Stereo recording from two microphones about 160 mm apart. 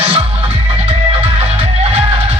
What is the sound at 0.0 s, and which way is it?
Music, 35° right (ahead or behind).